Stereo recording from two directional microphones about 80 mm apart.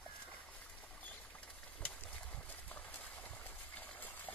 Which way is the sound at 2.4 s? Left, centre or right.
Left.